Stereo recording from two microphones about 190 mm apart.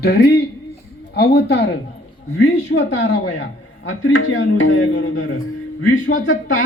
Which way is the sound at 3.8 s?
85° left.